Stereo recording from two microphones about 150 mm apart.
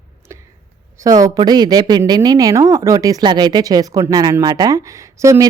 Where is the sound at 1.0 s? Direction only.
25° right (ahead or behind).